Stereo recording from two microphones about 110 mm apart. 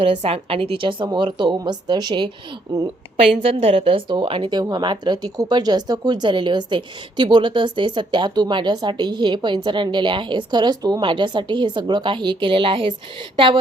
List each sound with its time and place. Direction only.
0.0 s speech: 65° right (ahead or behind); by 2.3 s 40° right (ahead or behind)
3.4 s speech: 60° right (ahead or behind)